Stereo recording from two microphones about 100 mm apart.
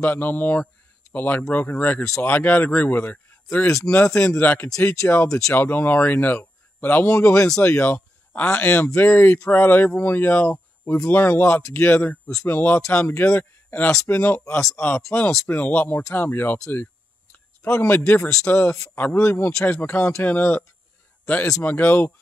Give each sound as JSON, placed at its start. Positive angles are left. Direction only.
{"t": 0.0, "sound": "speech", "side_deg": 20}
{"t": 16.7, "sound": "a sound", "side_deg": 15}
{"t": 18.4, "sound": "speech", "side_deg": 20}
{"t": 21.6, "sound": "speech", "side_deg": 20}